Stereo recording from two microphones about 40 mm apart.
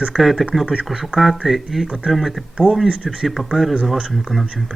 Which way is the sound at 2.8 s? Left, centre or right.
Right.